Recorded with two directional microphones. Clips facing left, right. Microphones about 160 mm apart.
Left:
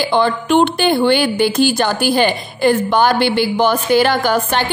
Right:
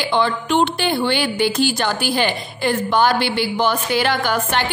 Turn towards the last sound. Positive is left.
turn(degrees=35)  # may be behind; listen again after turning